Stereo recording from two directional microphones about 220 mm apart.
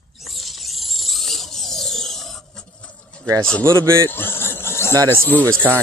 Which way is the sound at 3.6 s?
15° right (ahead or behind).